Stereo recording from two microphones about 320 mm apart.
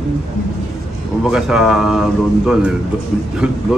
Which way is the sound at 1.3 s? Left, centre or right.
Centre.